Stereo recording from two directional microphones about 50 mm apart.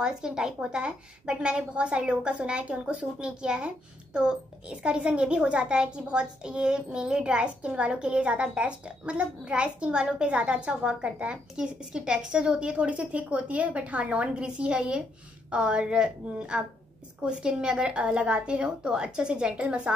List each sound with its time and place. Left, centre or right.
0.0 s a woman's voice: centre